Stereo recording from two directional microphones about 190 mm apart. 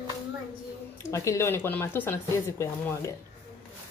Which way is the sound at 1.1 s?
15° left (ahead or behind).